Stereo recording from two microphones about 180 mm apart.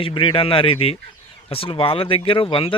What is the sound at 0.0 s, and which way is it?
Speech, 30° left (ahead or behind).